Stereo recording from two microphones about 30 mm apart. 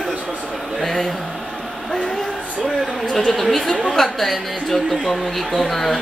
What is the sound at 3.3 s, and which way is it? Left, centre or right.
Speech, centre.